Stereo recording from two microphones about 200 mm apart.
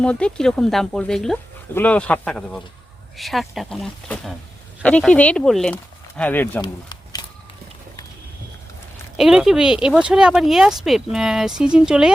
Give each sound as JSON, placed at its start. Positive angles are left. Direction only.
{"t": 0.0, "sound": "speech", "side_deg": 5}
{"t": 6.6, "sound": "a sound", "side_deg": 20}
{"t": 9.1, "sound": "speech", "side_deg": 0}